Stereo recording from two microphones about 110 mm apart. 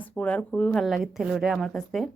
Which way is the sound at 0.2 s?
10° left (ahead or behind).